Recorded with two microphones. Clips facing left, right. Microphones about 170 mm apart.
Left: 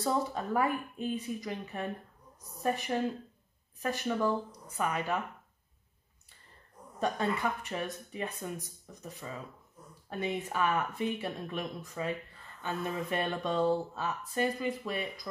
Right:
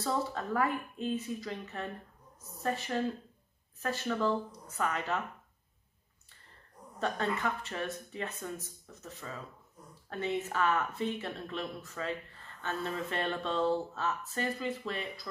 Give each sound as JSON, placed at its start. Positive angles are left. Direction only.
{"t": 0.0, "sound": "speech", "side_deg": 15}
{"t": 7.0, "sound": "speech", "side_deg": 15}